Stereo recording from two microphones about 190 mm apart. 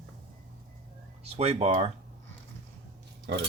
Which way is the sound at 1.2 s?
35° right (ahead or behind).